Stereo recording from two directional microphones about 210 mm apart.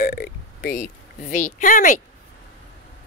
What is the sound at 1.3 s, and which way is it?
Speech, 40° left (ahead or behind).